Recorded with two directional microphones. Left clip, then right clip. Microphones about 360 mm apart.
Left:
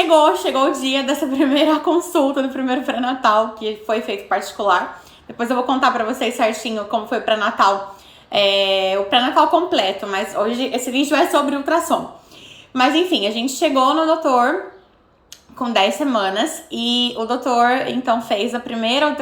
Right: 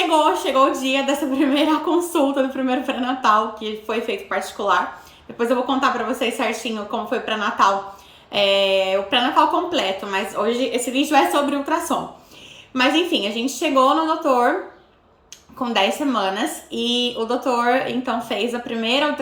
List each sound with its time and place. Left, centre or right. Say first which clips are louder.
0.0 s a woman's voice: left 4 dB; centre
15.5 s a woman's voice: left 3 dB; centre